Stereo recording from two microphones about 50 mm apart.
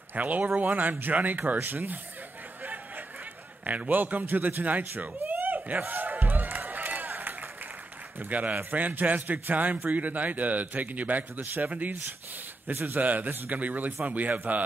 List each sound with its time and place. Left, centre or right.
0.1 s a man's voice: right
3.6 s a sound: right
8.2 s a man's voice: right